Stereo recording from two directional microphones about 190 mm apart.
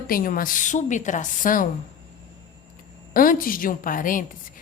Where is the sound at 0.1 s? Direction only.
45° left (ahead or behind).